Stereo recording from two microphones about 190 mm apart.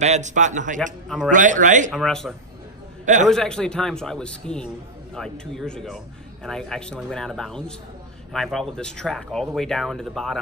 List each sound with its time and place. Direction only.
0.0 s a man's voice: 40° right (ahead or behind)
1.0 s speech: centre (ahead or behind)
1.3 s a man's voice: 40° right (ahead or behind)
1.9 s speech: centre (ahead or behind)